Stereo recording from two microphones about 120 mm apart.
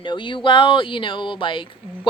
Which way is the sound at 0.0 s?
45° left (ahead or behind).